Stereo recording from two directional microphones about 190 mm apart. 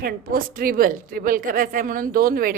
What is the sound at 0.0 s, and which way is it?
A woman's voice, 50° right (ahead or behind).